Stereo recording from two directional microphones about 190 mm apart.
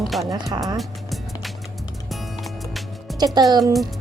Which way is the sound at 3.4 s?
25° right (ahead or behind).